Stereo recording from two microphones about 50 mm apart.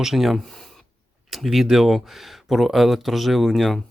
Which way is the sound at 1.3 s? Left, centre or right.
Centre.